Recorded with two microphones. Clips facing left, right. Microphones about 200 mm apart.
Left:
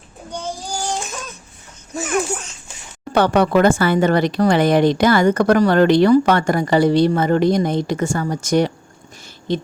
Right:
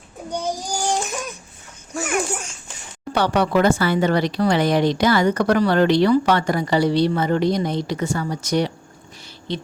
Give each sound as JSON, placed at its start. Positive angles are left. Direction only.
{"t": 0.3, "sound": "child singing", "side_deg": -10}
{"t": 2.0, "sound": "a child's voice", "side_deg": -10}
{"t": 3.2, "sound": "a woman's voice", "side_deg": 50}